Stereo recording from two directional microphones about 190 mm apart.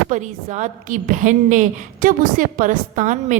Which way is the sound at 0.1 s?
40° right (ahead or behind).